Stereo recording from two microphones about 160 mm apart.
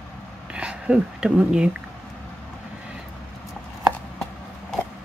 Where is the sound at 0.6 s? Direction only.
5° right (ahead or behind).